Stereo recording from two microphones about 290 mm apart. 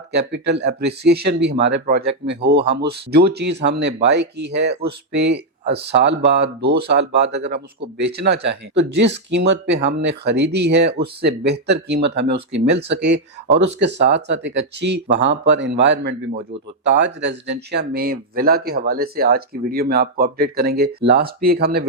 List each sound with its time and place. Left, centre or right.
0.1 s speech: right